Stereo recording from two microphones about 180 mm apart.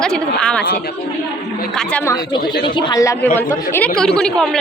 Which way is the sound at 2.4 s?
65° left (ahead or behind).